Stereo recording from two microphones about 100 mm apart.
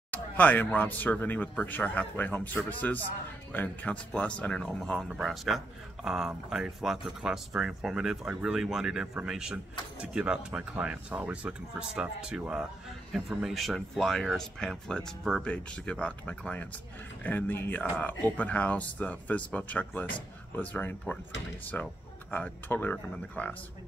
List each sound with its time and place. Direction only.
0.1 s speech: 15° left (ahead or behind)